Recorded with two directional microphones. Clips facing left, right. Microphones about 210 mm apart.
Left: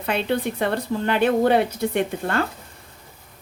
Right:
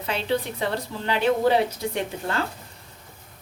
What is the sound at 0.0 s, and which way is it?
A woman's voice, 55° left (ahead or behind).